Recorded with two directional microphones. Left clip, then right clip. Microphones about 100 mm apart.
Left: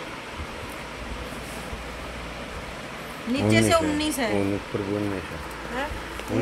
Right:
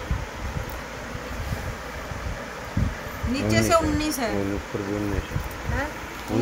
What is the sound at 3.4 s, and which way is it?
Speech, 15° left (ahead or behind).